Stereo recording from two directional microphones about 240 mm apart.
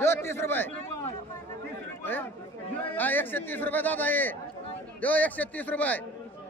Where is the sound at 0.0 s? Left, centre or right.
Centre.